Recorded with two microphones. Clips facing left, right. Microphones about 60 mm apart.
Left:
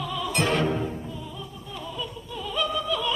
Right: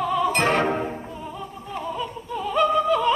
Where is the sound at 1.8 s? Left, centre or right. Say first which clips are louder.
Right 5 dB; right.